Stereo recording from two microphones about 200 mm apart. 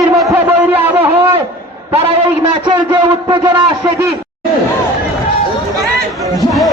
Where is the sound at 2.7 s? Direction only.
20° right (ahead or behind).